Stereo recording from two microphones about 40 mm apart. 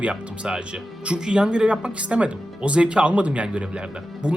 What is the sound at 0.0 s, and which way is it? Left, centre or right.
Speech, right.